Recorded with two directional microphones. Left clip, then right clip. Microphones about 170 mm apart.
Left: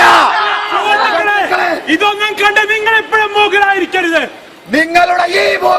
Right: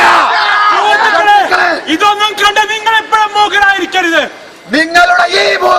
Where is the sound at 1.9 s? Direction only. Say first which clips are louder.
Right 2 dB; centre (ahead or behind).